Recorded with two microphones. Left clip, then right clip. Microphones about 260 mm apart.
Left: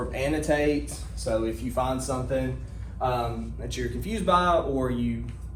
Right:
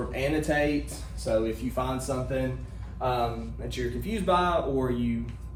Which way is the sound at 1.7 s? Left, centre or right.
Centre.